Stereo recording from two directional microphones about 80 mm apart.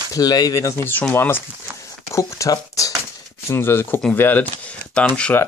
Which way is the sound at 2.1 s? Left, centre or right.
Left.